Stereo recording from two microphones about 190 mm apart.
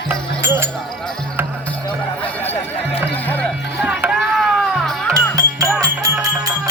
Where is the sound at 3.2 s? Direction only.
10° left (ahead or behind).